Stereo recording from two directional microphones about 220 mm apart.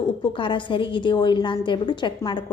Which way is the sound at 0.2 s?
20° left (ahead or behind).